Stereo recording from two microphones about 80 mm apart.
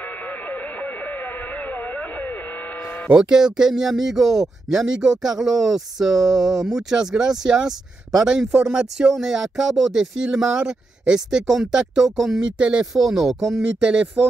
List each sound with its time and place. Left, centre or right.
1.7 s a sound: centre
3.1 s speech: centre
13.7 s speech: centre